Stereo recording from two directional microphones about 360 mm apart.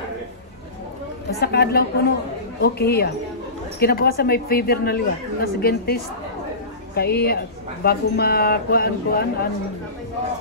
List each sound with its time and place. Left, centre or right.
1.4 s speech: left
7.0 s speech: left